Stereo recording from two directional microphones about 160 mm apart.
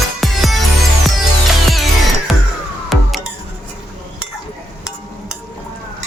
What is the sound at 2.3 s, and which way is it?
Music, centre (ahead or behind).